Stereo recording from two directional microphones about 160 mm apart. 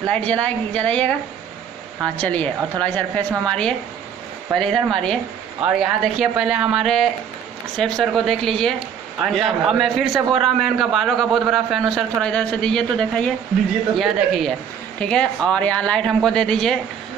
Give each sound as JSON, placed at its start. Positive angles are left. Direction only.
{"t": 0.0, "sound": "a woman's voice", "side_deg": 5}
{"t": 2.1, "sound": "a woman's voice", "side_deg": 10}